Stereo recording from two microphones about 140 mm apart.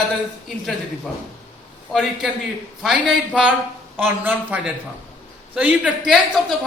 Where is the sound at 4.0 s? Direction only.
15° right (ahead or behind).